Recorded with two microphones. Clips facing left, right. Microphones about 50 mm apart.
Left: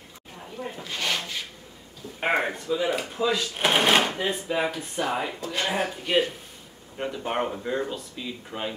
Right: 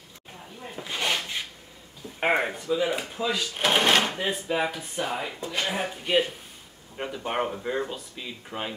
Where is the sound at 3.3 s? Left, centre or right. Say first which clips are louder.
Right 1 dB; centre.